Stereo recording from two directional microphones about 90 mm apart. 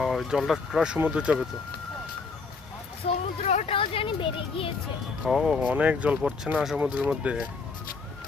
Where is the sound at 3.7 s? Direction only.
85° left.